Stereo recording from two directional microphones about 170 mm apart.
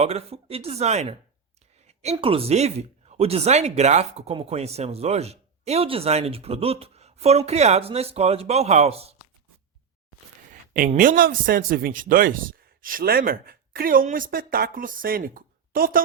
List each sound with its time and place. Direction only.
0.0 s speech: 35° right (ahead or behind)
1.9 s a sound: 40° right (ahead or behind)
2.1 s speech: 35° right (ahead or behind)
10.5 s a man's voice: 55° right (ahead or behind)